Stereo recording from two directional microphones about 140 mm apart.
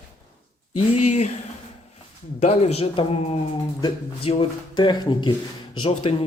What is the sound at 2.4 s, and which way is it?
Speech, 50° left (ahead or behind).